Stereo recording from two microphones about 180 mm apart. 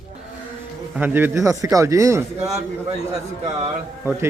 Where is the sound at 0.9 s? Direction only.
10° right (ahead or behind).